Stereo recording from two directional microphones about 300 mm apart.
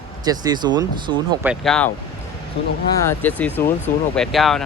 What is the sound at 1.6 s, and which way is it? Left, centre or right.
Speech, centre.